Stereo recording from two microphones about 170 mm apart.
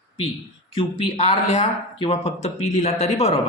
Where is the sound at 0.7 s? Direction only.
30° left (ahead or behind).